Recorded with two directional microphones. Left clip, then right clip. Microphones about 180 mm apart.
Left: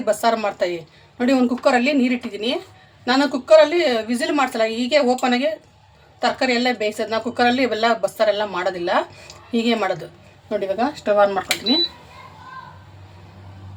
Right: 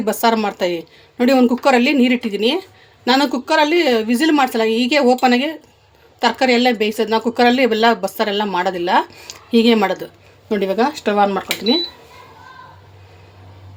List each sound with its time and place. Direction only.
0.0 s speech: 50° right (ahead or behind); by 11.8 s 65° right (ahead or behind)